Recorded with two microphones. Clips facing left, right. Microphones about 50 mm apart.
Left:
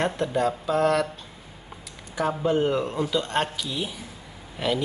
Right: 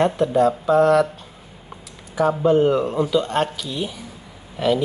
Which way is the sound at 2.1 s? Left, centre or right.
Centre.